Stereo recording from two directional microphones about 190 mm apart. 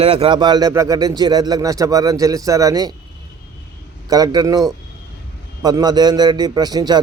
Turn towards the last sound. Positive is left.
turn(degrees=-20)  # may be behind; listen again after turning